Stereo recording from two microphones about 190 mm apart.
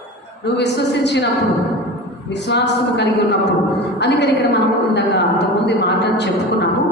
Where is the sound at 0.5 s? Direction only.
65° left (ahead or behind).